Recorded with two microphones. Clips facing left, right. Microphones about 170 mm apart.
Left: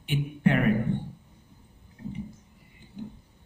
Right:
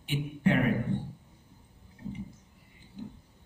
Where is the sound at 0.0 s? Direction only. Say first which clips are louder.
Left 3 dB; 60° left (ahead or behind).